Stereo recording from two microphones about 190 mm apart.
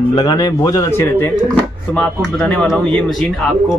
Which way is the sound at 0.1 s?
20° left (ahead or behind).